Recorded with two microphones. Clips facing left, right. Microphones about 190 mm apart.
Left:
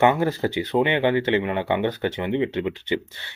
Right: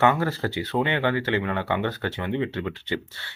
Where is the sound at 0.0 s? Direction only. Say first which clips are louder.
Left 3 dB; 20° left (ahead or behind).